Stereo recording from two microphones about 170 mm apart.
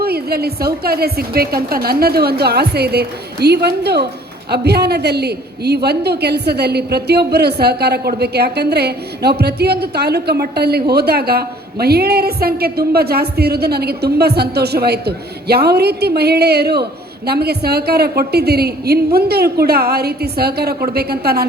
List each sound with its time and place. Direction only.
0.0 s a woman's voice: 65° right (ahead or behind)